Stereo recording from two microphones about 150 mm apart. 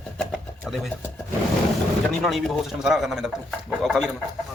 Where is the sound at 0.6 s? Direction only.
Centre (ahead or behind).